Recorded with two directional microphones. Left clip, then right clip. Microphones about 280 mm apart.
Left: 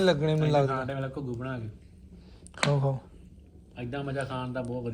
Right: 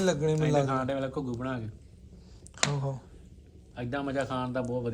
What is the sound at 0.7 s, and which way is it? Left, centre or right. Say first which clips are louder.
Speech: right 1 dB; right.